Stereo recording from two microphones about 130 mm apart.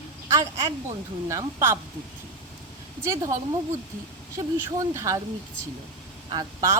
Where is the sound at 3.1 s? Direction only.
25° right (ahead or behind).